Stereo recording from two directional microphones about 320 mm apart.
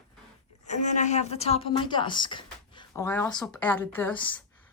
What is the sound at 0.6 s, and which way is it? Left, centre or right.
A woman's voice, left.